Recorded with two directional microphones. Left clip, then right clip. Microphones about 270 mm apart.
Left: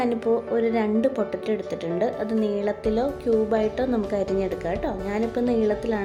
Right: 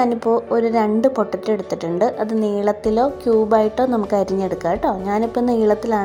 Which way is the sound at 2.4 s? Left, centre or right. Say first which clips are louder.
Right 6 dB; centre.